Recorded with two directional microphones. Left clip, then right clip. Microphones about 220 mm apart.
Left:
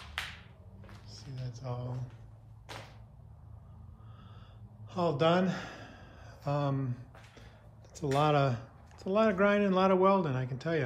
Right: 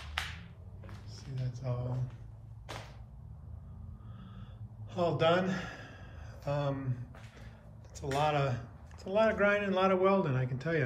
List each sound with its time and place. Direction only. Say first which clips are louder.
1.3 s a sound: right 1 dB; 15° left (ahead or behind)
4.9 s speech: even; 15° left (ahead or behind)
8.2 s a man's voice: left 2 dB; 25° left (ahead or behind); by 10.8 s 10° left (ahead or behind)